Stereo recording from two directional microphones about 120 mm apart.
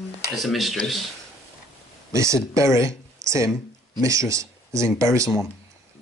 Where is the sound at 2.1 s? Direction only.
25° right (ahead or behind).